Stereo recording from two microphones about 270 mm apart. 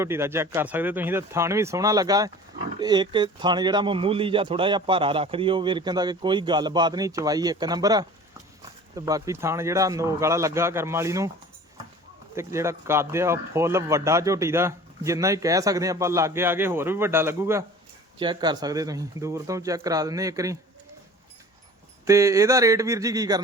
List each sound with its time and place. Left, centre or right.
0.0 s speech: centre
12.4 s speech: centre
22.0 s speech: centre